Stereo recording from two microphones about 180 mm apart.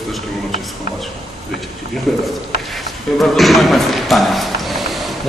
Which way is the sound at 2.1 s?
Centre (ahead or behind).